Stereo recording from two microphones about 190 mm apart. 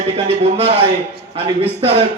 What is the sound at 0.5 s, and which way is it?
A man's voice, 30° right (ahead or behind).